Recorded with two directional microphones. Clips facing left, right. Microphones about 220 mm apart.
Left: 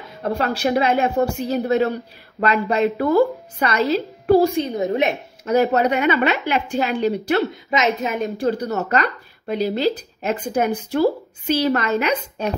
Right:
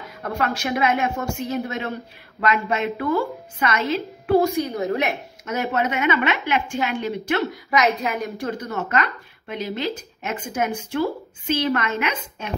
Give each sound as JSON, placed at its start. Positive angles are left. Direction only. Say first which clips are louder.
{"t": 0.2, "sound": "a woman's voice", "louder": "left 4 dB", "side_deg": 30}
{"t": 5.4, "sound": "a woman's voice", "louder": "left 7 dB", "side_deg": 35}
{"t": 7.5, "sound": "a woman's voice", "louder": "left 1 dB", "side_deg": 25}